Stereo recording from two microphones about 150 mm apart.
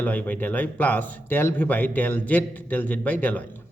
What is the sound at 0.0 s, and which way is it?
A man's voice, 10° left (ahead or behind).